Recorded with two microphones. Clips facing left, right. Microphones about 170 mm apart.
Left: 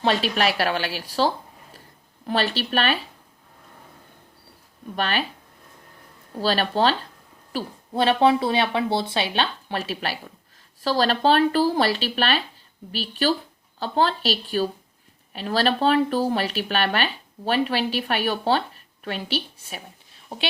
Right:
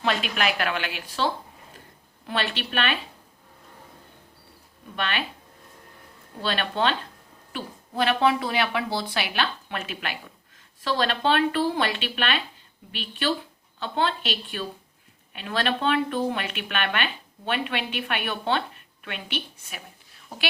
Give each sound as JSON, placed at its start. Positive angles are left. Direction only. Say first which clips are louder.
{"t": 0.0, "sound": "speech", "louder": "left 4 dB", "side_deg": 30}
{"t": 4.9, "sound": "speech", "louder": "left 4 dB", "side_deg": 40}
{"t": 6.4, "sound": "speech", "louder": "left 4 dB", "side_deg": 35}